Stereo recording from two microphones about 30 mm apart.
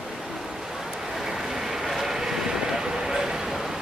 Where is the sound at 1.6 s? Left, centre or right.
Centre.